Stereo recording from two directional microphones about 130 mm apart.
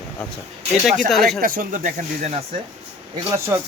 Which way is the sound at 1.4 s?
90° right.